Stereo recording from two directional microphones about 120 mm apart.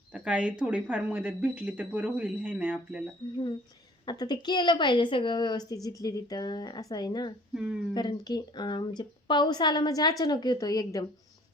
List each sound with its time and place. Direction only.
0.1 s a sound: 10° right (ahead or behind)
0.6 s speech: 10° right (ahead or behind)
4.0 s a woman's voice: 35° left (ahead or behind)
7.5 s speech: 5° right (ahead or behind)
7.9 s a woman's voice: 35° left (ahead or behind)